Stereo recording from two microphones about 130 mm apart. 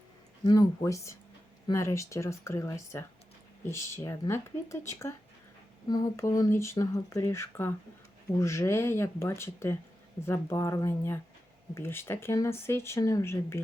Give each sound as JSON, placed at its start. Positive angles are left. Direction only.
{"t": 0.4, "sound": "speech", "side_deg": 30}